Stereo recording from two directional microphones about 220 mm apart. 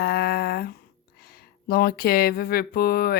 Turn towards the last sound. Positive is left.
turn(degrees=45)  # may be behind; listen again after turning